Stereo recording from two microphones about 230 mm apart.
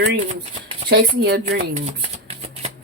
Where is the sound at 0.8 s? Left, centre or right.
Right.